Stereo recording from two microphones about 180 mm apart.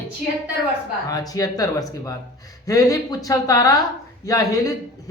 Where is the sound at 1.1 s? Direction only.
20° left (ahead or behind).